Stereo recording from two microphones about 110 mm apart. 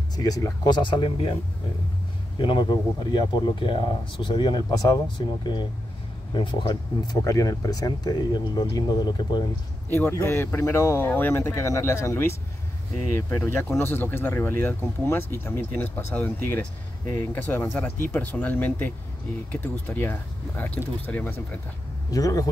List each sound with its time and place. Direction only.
0.1 s speech: 35° left (ahead or behind)
2.3 s speech: 45° left (ahead or behind)
4.6 s speech: 30° left (ahead or behind)
5.4 s speech: 45° left (ahead or behind)
7.2 s speech: 30° left (ahead or behind)
9.8 s speech: 15° left (ahead or behind)
22.1 s speech: 30° left (ahead or behind)